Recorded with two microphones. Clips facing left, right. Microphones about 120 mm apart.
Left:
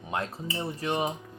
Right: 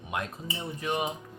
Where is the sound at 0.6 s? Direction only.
35° left (ahead or behind).